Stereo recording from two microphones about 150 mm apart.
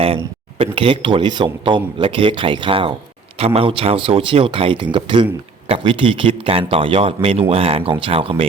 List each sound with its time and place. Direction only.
0.6 s speech: 35° right (ahead or behind)